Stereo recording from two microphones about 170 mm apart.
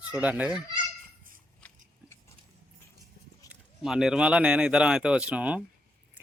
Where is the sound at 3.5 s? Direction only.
5° right (ahead or behind).